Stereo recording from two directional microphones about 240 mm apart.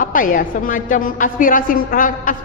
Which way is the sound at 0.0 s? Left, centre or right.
Left.